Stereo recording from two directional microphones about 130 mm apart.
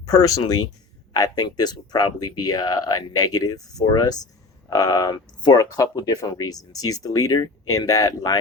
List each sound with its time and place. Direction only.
0.0 s speech: 30° left (ahead or behind)